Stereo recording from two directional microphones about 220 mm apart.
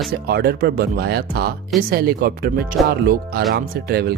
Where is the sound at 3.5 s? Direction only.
45° right (ahead or behind).